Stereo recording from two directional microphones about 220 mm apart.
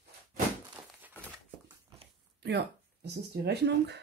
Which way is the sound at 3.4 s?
50° right (ahead or behind).